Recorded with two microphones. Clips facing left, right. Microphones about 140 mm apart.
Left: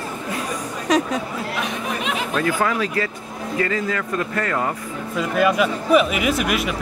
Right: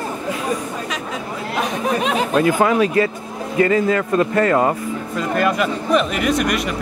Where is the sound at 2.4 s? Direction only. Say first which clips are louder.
Right 6 dB; 20° right (ahead or behind).